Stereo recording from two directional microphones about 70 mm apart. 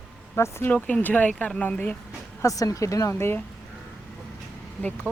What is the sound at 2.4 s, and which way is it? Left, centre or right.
Speech, left.